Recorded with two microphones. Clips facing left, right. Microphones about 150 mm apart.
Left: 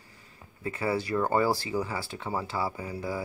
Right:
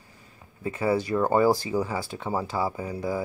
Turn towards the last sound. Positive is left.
turn(degrees=-20)  # may be behind; listen again after turning